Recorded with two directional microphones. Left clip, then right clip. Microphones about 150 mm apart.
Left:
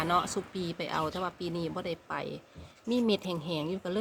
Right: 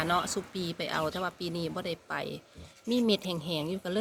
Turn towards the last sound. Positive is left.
turn(degrees=5)  # may be behind; listen again after turning